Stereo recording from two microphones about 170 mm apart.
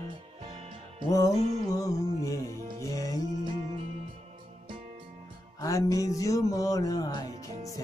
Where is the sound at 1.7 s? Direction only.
20° left (ahead or behind).